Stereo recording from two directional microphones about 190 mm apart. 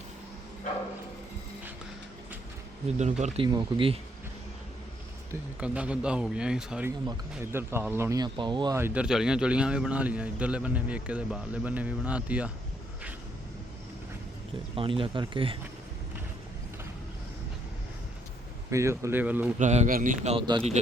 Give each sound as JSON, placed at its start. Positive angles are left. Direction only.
{"t": 3.0, "sound": "speech", "side_deg": -40}
{"t": 3.4, "sound": "speech", "side_deg": -25}
{"t": 5.3, "sound": "speech", "side_deg": -5}
{"t": 7.0, "sound": "speech", "side_deg": -15}
{"t": 14.8, "sound": "speech", "side_deg": -30}
{"t": 18.7, "sound": "speech", "side_deg": -15}
{"t": 19.5, "sound": "speech", "side_deg": -40}